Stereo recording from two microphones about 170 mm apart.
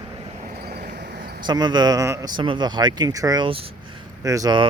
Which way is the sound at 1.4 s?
25° right (ahead or behind).